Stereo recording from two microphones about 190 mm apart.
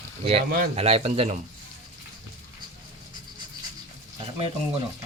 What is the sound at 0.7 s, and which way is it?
Speech, 30° right (ahead or behind).